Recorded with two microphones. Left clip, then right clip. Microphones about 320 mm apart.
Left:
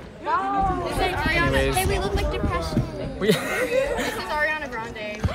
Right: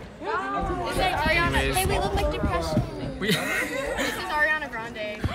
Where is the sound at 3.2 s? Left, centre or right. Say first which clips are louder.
Left 3 dB; centre.